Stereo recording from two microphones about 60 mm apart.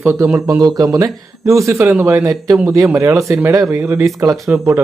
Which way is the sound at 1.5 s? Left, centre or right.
Right.